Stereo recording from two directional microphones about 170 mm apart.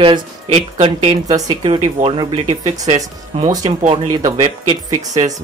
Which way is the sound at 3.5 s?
25° right (ahead or behind).